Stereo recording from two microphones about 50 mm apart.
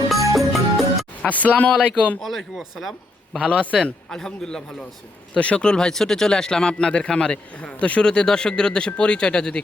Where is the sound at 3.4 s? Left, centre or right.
Left.